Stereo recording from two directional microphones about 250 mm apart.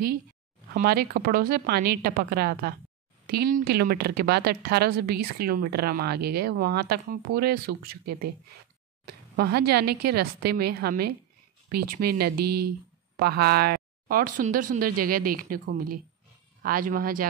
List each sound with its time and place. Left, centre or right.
0.7 s a woman's voice: right
9.0 s a woman's voice: right
12.4 s speech: right
13.1 s a woman's voice: right